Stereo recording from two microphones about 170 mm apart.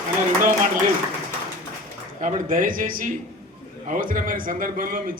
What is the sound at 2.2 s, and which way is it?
A man's voice, 50° right (ahead or behind).